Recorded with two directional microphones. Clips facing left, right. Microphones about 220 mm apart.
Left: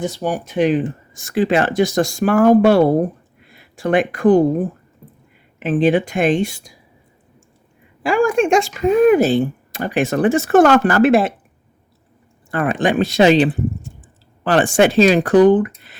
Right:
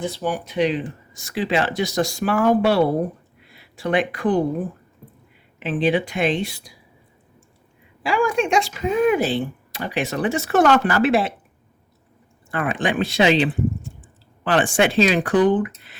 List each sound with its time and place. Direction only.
0.0 s speech: 45° left (ahead or behind)
8.0 s speech: 50° left (ahead or behind)
12.5 s speech: 40° left (ahead or behind)